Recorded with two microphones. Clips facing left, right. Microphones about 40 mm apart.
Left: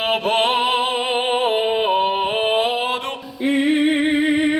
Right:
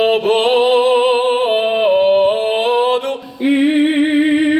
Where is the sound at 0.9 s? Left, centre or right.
Centre.